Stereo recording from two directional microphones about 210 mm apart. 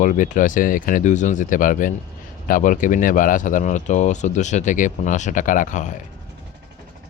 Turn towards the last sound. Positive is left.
turn(degrees=35)  # may be behind; listen again after turning